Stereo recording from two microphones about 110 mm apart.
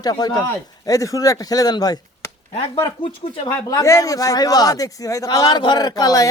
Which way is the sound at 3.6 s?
30° left (ahead or behind).